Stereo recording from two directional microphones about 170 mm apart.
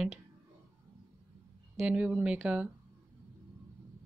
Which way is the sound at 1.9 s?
5° right (ahead or behind).